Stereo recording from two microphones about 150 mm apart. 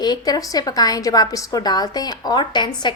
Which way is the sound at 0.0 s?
25° left (ahead or behind).